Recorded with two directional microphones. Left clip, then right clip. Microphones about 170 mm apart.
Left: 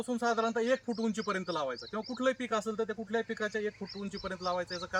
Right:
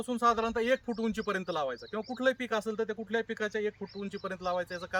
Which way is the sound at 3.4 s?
35° right (ahead or behind).